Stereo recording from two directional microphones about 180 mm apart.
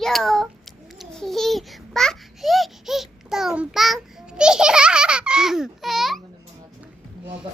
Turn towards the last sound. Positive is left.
turn(degrees=0)  # may be behind; listen again after turning